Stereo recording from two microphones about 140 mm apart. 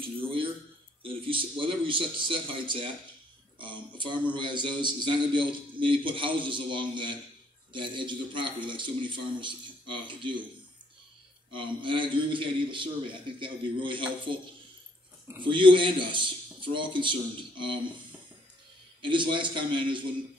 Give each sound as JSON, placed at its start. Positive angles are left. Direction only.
{"t": 0.0, "sound": "a man's voice", "side_deg": -40}
{"t": 11.5, "sound": "a man's voice", "side_deg": -35}
{"t": 18.9, "sound": "a man's voice", "side_deg": -35}